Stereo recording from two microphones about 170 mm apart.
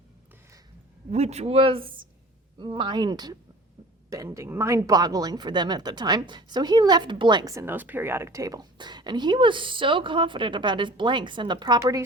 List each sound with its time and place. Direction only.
1.1 s speech: 40° right (ahead or behind); by 12.0 s 20° right (ahead or behind)